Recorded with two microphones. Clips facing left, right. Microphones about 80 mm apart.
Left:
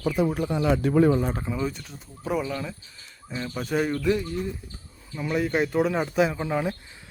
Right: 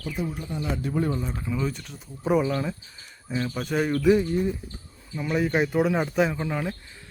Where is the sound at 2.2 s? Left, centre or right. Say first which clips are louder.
Right 5 dB; centre.